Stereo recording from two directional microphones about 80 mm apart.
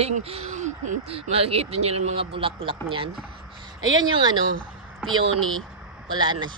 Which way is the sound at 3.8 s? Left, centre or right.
Right.